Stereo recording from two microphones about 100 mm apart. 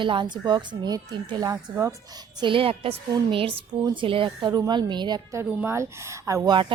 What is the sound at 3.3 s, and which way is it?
Speech, 65° right (ahead or behind).